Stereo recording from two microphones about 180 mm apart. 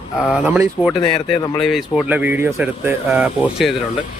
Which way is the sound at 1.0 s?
30° left (ahead or behind).